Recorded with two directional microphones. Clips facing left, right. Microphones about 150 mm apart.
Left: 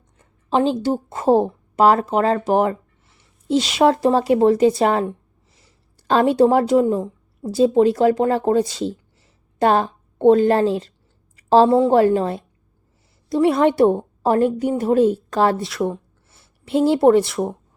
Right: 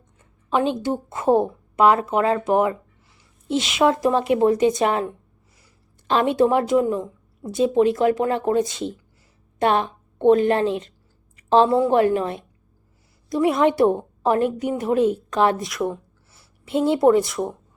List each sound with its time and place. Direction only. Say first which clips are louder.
0.5 s a woman's voice: left 3 dB; 30° left (ahead or behind)